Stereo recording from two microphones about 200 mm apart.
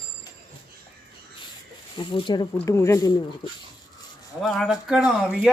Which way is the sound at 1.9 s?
25° left (ahead or behind).